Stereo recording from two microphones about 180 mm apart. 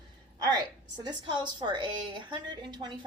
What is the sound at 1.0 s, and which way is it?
Speech, 25° right (ahead or behind).